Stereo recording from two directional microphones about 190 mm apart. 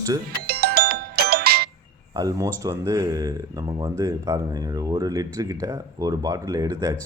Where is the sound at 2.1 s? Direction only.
20° right (ahead or behind).